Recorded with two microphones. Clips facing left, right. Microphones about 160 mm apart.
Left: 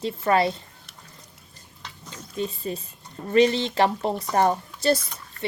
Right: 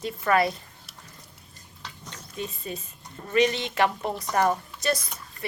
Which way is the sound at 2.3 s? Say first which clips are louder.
Left 5 dB; 30° left (ahead or behind).